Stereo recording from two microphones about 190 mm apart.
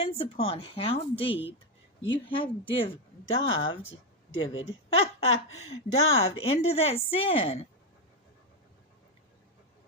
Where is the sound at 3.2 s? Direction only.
90° left.